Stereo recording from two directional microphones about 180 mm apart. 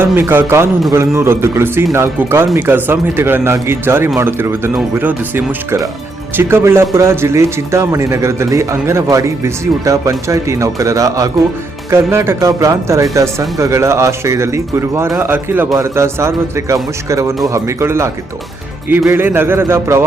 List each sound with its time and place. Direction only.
0.0 s a man's voice: 10° right (ahead or behind)